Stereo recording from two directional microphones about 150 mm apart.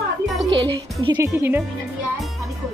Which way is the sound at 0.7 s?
25° right (ahead or behind).